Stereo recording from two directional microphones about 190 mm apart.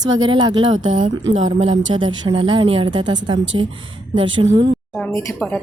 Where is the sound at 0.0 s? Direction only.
20° right (ahead or behind).